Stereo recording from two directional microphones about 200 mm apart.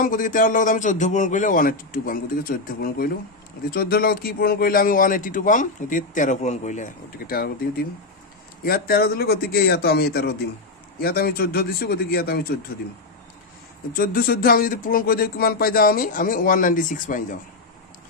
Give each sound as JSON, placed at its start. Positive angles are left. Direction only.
{"t": 0.0, "sound": "a man's voice", "side_deg": 40}
{"t": 13.9, "sound": "a man's voice", "side_deg": 45}